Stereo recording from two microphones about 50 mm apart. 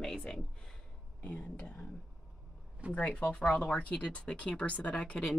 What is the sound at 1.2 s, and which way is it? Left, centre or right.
Speech, left.